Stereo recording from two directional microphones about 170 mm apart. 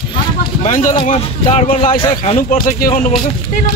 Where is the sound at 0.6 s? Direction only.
50° left (ahead or behind); by 2.4 s 30° left (ahead or behind).